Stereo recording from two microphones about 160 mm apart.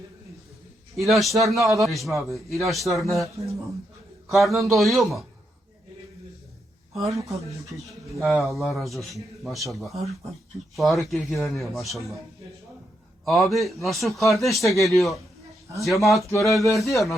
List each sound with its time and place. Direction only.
0.9 s a man's voice: centre (ahead or behind)
4.3 s a man's voice: centre (ahead or behind)
6.9 s speech: 20° right (ahead or behind)
8.4 s a man's voice: centre (ahead or behind)
13.2 s a man's voice: centre (ahead or behind)